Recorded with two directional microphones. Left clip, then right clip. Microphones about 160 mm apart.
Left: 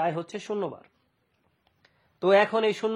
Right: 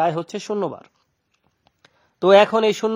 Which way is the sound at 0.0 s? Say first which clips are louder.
Right 7 dB; 35° right (ahead or behind).